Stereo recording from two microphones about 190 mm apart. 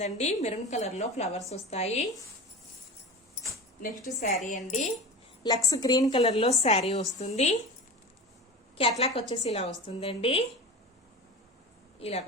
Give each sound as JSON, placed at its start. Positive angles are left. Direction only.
{"t": 0.0, "sound": "a woman's voice", "side_deg": 35}
{"t": 4.4, "sound": "a woman's voice", "side_deg": 40}
{"t": 5.4, "sound": "a woman's voice", "side_deg": 20}
{"t": 6.1, "sound": "a woman's voice", "side_deg": 35}
{"t": 8.8, "sound": "a woman's voice", "side_deg": 30}
{"t": 11.9, "sound": "speech", "side_deg": 30}